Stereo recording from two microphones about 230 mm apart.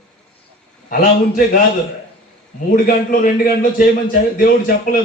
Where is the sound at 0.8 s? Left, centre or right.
Left.